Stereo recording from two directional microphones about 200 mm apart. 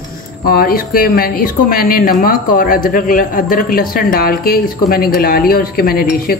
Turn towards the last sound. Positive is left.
turn(degrees=45)  # may be behind; listen again after turning